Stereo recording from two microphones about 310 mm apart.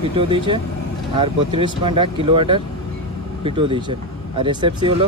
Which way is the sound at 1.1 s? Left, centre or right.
Centre.